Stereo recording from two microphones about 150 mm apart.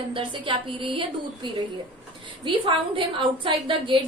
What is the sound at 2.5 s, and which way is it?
A woman's voice, 35° right (ahead or behind).